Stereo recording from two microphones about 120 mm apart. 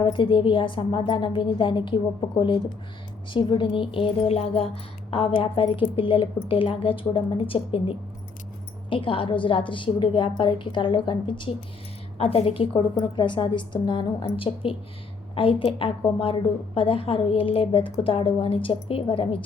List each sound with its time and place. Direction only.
0.0 s a woman's voice: 45° left (ahead or behind)
3.2 s a woman's voice: 45° left (ahead or behind)
12.1 s a woman's voice: 60° left (ahead or behind)